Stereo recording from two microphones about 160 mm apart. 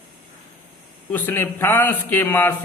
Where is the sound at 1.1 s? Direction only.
10° left (ahead or behind).